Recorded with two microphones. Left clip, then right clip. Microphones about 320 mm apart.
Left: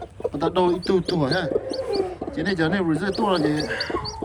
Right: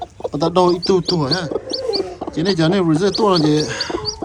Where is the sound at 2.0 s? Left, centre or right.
Centre.